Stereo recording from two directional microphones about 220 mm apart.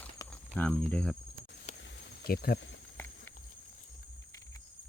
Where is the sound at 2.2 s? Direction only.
45° left (ahead or behind).